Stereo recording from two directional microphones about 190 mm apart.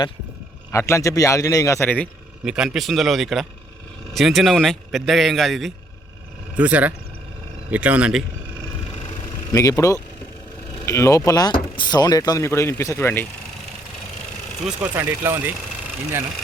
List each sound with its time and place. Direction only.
0.7 s speech: 15° left (ahead or behind)
2.4 s speech: 5° right (ahead or behind)
9.5 s speech: 15° left (ahead or behind)
14.6 s speech: 5° right (ahead or behind)